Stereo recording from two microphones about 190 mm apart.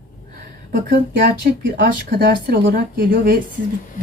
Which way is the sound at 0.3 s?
50° right (ahead or behind).